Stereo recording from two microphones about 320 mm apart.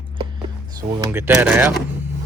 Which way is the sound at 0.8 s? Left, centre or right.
Centre.